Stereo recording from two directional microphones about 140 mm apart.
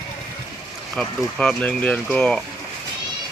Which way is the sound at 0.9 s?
5° left (ahead or behind).